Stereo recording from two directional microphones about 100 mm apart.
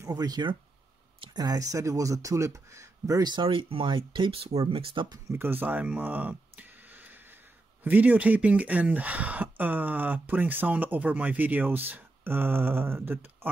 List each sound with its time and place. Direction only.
0.0 s speech: 40° right (ahead or behind)
3.4 s speech: 60° right (ahead or behind)
5.3 s a sound: 20° right (ahead or behind)
7.8 s speech: 15° right (ahead or behind)